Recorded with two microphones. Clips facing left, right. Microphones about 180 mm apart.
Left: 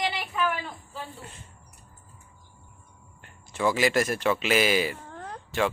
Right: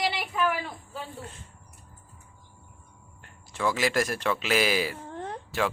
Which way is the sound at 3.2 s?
Centre (ahead or behind).